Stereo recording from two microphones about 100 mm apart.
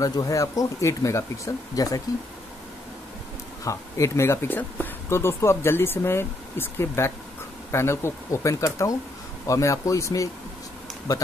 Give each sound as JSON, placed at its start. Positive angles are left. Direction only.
{"t": 0.0, "sound": "speech", "side_deg": 40}
{"t": 3.6, "sound": "speech", "side_deg": 30}